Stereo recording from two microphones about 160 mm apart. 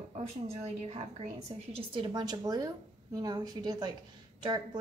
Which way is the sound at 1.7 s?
30° right (ahead or behind).